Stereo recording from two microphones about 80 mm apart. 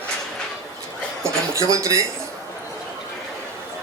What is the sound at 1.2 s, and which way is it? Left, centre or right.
Speech, right.